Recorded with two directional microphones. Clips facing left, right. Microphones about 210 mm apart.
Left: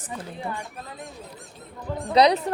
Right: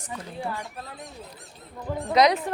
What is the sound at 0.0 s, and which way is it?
Speech, 10° right (ahead or behind).